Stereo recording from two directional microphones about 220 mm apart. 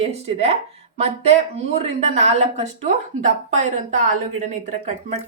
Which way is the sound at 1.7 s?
30° right (ahead or behind).